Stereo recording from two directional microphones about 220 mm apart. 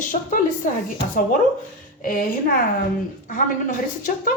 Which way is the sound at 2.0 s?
40° left (ahead or behind).